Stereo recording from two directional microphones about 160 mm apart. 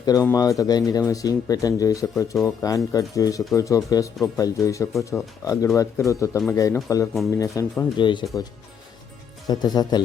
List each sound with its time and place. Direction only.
0.0 s speech: 20° left (ahead or behind)
9.5 s speech: 25° left (ahead or behind)